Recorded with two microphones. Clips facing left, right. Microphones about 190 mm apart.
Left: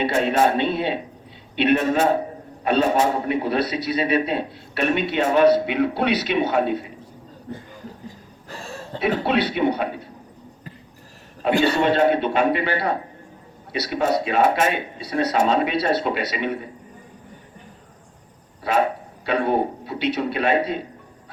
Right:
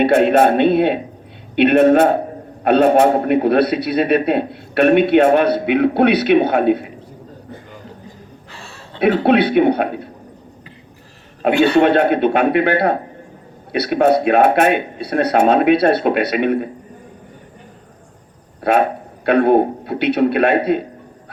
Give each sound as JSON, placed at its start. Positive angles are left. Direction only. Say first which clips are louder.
{"t": 0.0, "sound": "a man's voice", "louder": "right 7 dB", "side_deg": -60}
{"t": 8.4, "sound": "a sound", "louder": "left 8 dB", "side_deg": 40}
{"t": 9.0, "sound": "a man's voice", "louder": "right 8 dB", "side_deg": -60}
{"t": 11.6, "sound": "a man's voice", "louder": "right 6 dB", "side_deg": -60}
{"t": 18.6, "sound": "speech", "louder": "right 5 dB", "side_deg": -60}